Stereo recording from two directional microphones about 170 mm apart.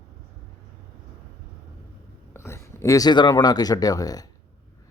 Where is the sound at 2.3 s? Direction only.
15° left (ahead or behind).